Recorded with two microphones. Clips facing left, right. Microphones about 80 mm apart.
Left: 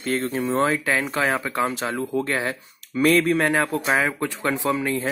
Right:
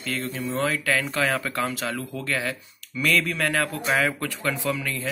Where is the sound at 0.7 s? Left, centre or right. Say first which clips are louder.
Left 2 dB; left.